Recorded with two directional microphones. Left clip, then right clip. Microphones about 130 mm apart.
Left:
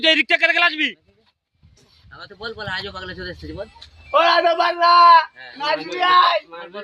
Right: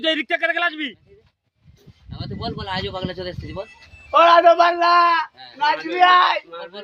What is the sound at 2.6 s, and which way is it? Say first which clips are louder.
A man's voice: right 1 dB; 30° right (ahead or behind).